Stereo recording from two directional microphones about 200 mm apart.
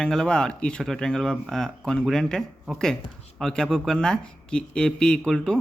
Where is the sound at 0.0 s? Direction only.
5° left (ahead or behind).